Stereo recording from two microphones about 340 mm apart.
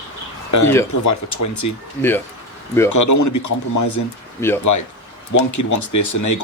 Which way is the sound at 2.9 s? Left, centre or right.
Left.